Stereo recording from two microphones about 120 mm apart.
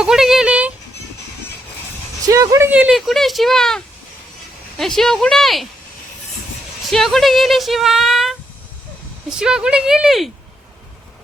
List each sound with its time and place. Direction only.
0.0 s speech: 5° right (ahead or behind)
2.2 s speech: 30° right (ahead or behind)
2.6 s speech: 10° right (ahead or behind)
3.1 s speech: centre (ahead or behind)
6.9 s speech: centre (ahead or behind)